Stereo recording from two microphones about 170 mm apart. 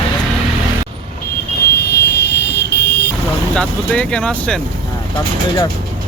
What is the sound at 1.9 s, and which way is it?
Vehicle, 80° left.